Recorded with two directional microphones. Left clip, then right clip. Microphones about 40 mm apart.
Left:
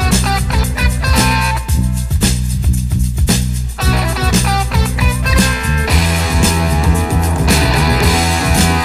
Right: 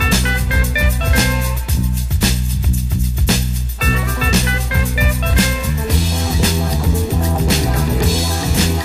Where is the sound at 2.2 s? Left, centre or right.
Left.